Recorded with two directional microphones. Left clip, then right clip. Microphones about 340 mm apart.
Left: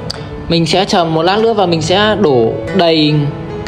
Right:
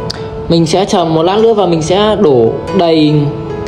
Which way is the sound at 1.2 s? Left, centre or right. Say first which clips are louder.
Right 2 dB; centre.